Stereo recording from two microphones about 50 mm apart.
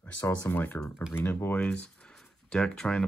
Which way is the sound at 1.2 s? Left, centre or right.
Left.